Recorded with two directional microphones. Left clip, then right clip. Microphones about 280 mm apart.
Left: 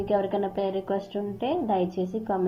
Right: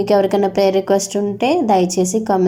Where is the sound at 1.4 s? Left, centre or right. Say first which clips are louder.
Right 11 dB; right.